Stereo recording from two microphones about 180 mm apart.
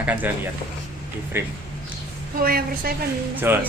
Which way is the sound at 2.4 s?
55° right (ahead or behind).